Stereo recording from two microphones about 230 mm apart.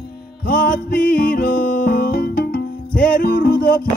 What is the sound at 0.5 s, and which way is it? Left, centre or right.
Music, left.